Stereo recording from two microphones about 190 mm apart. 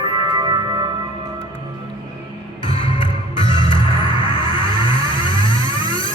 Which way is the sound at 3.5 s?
25° left (ahead or behind).